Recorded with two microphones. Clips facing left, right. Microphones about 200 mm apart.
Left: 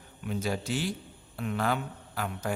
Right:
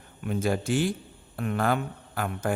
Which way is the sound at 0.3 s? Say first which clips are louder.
Right 5 dB; 50° right (ahead or behind).